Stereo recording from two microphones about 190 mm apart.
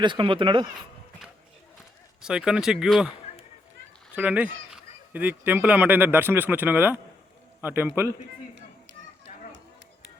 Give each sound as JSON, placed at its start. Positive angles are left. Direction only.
{"t": 0.0, "sound": "speech", "side_deg": -25}
{"t": 2.2, "sound": "speech", "side_deg": -5}
{"t": 4.1, "sound": "a man's voice", "side_deg": -5}